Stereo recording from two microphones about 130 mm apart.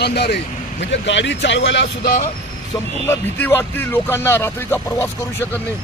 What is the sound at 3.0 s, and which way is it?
Speech, 15° left (ahead or behind).